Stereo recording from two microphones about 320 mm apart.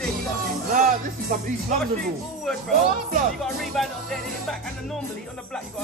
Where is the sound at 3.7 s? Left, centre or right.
Centre.